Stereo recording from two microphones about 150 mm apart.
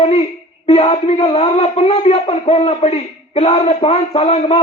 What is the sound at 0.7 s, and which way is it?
A man's voice, 40° left (ahead or behind).